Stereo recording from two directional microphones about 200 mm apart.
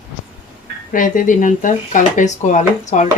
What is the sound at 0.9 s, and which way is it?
Speech, 40° left (ahead or behind).